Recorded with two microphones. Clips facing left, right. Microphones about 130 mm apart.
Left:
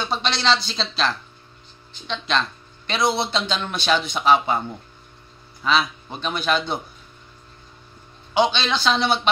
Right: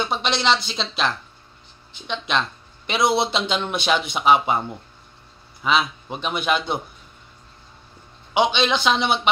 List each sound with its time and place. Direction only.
0.1 s a man's voice: 20° right (ahead or behind)
5.6 s a man's voice: 15° right (ahead or behind)
8.3 s a man's voice: 15° right (ahead or behind)